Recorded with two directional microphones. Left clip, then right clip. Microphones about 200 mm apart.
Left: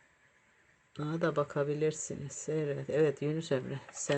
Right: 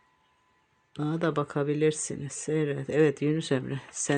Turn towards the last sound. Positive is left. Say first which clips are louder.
# right 5 dB
turn(degrees=-40)  # may be behind; listen again after turning